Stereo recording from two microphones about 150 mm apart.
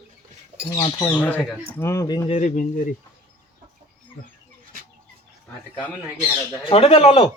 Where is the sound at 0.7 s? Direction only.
30° left (ahead or behind).